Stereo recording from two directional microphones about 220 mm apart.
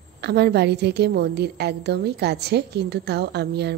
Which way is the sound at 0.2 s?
50° right (ahead or behind).